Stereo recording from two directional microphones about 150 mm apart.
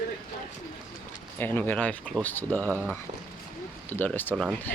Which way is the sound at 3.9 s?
10° left (ahead or behind).